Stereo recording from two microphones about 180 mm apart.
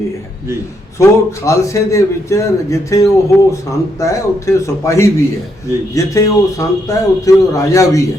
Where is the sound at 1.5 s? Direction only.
15° left (ahead or behind).